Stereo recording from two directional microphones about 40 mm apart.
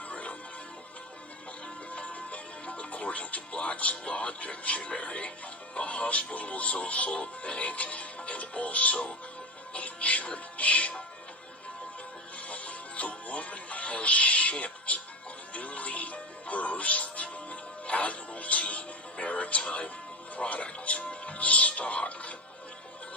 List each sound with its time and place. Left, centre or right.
0.1 s music: left
1.9 s music: left
5.7 s speech: left
12.4 s music: left
14.5 s speech: left
15.5 s music: left
20.3 s speech: left